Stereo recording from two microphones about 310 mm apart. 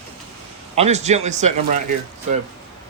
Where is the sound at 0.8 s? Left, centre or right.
Right.